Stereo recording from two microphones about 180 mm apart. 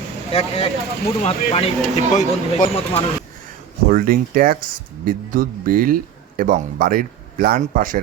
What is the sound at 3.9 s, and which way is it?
A man's voice, 55° right (ahead or behind).